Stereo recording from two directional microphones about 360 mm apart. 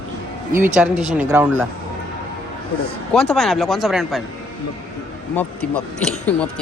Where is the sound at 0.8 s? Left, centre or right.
Centre.